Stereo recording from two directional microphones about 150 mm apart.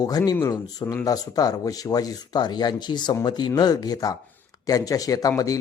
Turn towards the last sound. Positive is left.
turn(degrees=25)  # may be behind; listen again after turning